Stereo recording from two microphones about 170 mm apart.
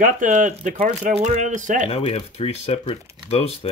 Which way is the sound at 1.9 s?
35° left (ahead or behind).